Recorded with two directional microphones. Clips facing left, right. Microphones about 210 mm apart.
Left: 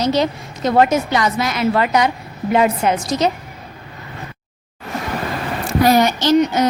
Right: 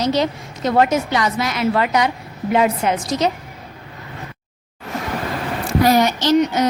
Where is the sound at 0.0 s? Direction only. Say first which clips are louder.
Left 1 dB; 45° left (ahead or behind).